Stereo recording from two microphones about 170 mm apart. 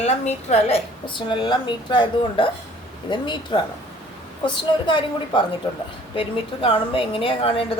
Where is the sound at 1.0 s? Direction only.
30° left (ahead or behind).